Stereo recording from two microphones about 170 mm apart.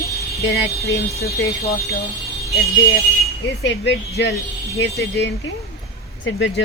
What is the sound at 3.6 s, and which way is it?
Speech, 90° left.